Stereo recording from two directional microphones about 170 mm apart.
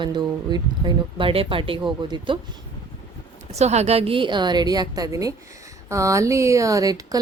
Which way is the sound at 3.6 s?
40° right (ahead or behind).